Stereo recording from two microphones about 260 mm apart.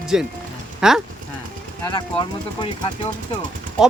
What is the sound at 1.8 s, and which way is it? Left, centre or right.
Speech, centre.